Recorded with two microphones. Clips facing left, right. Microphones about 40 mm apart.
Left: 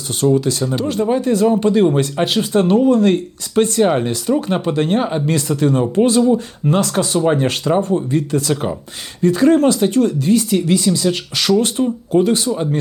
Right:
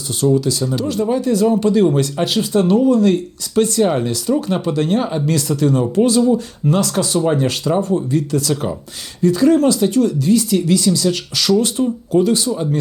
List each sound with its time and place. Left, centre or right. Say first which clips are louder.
0.3 s speech: left 1 dB; left